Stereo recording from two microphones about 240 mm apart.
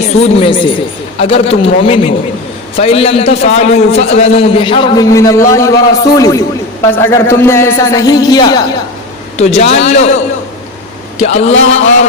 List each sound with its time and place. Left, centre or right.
0.0 s a man's voice: left
11.2 s a man's voice: left